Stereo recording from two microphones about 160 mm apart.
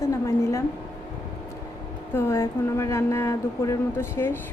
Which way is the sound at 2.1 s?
15° left (ahead or behind).